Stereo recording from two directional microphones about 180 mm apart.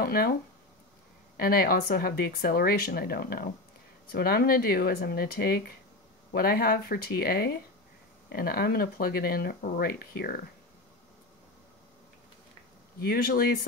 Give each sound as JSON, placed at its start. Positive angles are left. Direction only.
{"t": 0.0, "sound": "speech", "side_deg": 55}
{"t": 13.0, "sound": "speech", "side_deg": 55}